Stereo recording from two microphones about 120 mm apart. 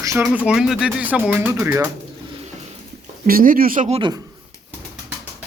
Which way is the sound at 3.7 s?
90° right.